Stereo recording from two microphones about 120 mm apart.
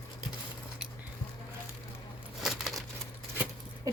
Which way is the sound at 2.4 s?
5° right (ahead or behind).